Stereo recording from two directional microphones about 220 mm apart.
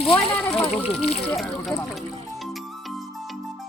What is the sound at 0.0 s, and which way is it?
Slosh, 25° left (ahead or behind).